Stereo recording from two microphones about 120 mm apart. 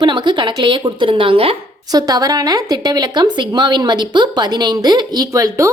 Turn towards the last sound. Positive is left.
turn(degrees=-30)  # may be behind; listen again after turning